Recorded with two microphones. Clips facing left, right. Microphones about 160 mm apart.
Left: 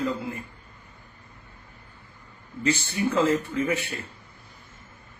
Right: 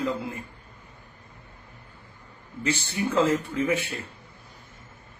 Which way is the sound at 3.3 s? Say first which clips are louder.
Even; 20° right (ahead or behind).